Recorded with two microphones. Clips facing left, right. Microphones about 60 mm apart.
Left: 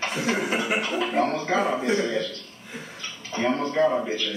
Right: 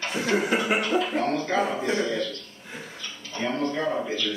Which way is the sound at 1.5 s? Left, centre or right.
Centre.